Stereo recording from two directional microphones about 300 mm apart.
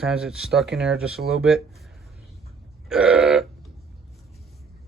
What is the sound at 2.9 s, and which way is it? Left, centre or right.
Burping, centre.